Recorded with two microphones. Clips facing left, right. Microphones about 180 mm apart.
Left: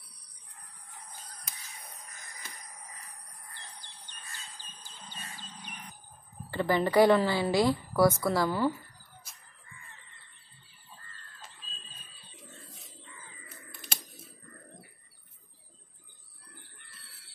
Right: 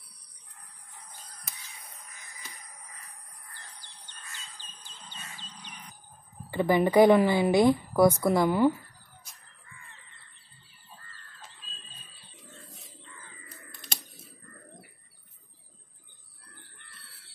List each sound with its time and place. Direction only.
3.5 s bird: 15° left (ahead or behind)
6.5 s a woman's voice: 15° right (ahead or behind)